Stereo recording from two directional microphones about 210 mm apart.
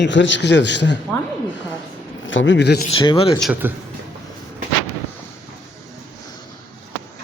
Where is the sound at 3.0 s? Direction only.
25° left (ahead or behind).